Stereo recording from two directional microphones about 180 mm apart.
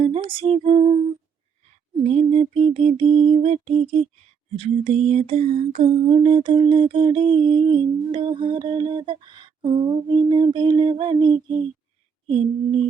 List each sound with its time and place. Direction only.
0.0 s music: 30° right (ahead or behind)
2.0 s music: 35° right (ahead or behind)
4.5 s lullaby: 35° right (ahead or behind)
12.3 s music: 30° right (ahead or behind)